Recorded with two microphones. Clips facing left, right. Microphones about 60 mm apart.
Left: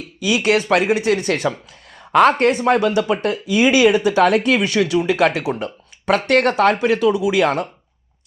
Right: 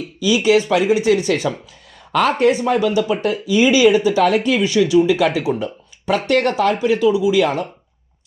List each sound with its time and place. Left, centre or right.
0.3 s speech: left
3.6 s speech: left